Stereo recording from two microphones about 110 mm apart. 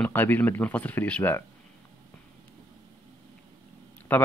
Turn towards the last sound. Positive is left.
turn(degrees=15)  # may be behind; listen again after turning